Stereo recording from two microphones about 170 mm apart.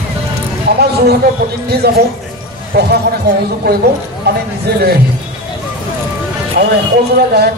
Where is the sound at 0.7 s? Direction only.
70° right (ahead or behind).